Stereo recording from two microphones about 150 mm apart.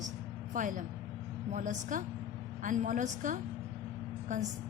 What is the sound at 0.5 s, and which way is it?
A woman's voice, 60° right (ahead or behind).